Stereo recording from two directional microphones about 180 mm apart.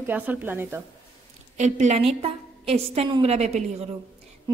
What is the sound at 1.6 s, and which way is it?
A woman's voice, 40° right (ahead or behind).